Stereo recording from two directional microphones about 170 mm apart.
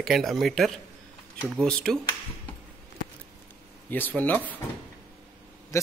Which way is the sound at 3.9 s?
10° left (ahead or behind).